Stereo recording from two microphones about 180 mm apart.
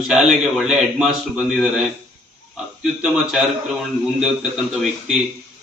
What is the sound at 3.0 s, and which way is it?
Speech, centre (ahead or behind).